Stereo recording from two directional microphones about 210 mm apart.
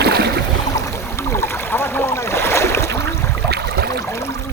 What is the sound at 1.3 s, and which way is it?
Boat, 10° left (ahead or behind).